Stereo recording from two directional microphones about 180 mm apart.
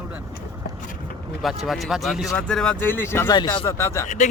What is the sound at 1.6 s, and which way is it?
Speech, centre (ahead or behind).